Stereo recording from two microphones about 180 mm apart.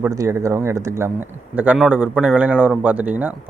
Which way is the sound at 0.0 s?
15° right (ahead or behind).